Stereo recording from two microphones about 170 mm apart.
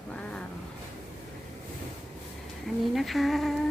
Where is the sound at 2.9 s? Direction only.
Centre (ahead or behind).